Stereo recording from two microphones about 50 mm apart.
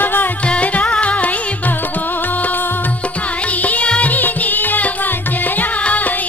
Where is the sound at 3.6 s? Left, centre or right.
Left.